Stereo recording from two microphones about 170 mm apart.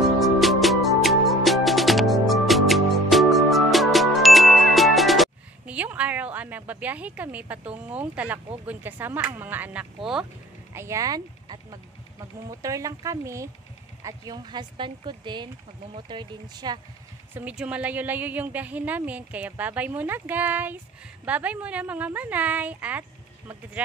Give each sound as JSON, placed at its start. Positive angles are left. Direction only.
{"t": 0.2, "sound": "music", "side_deg": 0}
{"t": 8.6, "sound": "a woman's voice", "side_deg": -10}
{"t": 17.3, "sound": "a woman's voice", "side_deg": -10}